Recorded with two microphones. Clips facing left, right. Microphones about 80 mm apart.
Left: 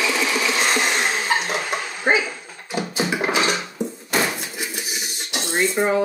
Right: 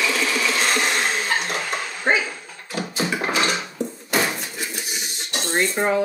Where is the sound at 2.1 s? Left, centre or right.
Centre.